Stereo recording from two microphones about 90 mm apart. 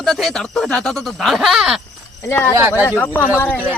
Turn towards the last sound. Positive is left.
turn(degrees=20)  # may be behind; listen again after turning